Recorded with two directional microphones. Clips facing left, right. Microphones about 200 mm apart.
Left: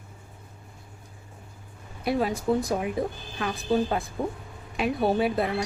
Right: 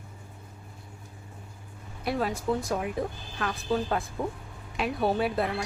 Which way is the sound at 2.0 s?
10° left (ahead or behind).